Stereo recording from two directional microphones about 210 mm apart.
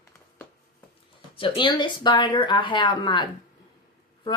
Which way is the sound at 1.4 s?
25° left (ahead or behind).